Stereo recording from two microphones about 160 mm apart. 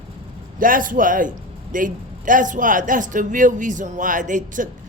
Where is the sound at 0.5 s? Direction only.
60° right (ahead or behind).